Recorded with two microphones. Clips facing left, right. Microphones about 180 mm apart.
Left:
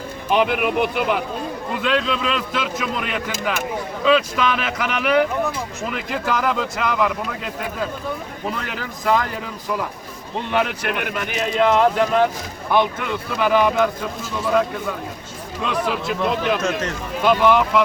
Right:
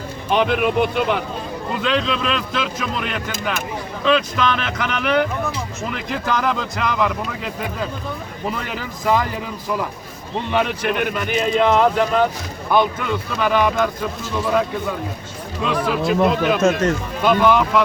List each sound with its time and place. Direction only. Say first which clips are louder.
0.3 s speech: right 1 dB; 5° left (ahead or behind)
15.6 s speech: right 3 dB; centre (ahead or behind)
16.6 s speech: right 6 dB; 45° right (ahead or behind)
17.2 s speech: even; centre (ahead or behind)